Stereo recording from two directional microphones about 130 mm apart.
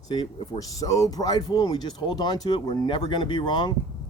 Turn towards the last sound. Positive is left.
turn(degrees=35)  # may be behind; listen again after turning